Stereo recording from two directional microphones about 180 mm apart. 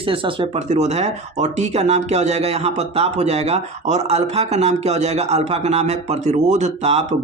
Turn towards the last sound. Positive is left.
turn(degrees=-35)  # may be behind; listen again after turning